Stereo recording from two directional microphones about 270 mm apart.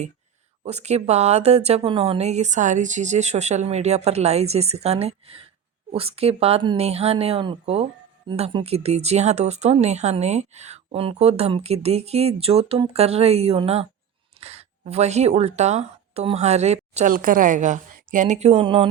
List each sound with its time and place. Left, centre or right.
0.6 s a woman's voice: right